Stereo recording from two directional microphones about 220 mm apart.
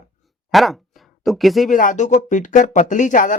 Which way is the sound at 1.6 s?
35° left (ahead or behind).